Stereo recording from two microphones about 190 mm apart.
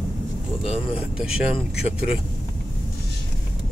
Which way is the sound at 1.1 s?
5° right (ahead or behind).